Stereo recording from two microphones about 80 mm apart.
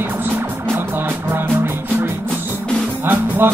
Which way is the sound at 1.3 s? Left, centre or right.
Right.